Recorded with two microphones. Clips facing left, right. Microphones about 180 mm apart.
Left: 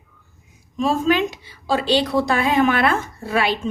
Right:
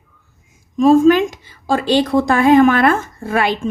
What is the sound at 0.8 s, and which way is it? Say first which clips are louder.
A woman's voice: right 9 dB; 45° right (ahead or behind).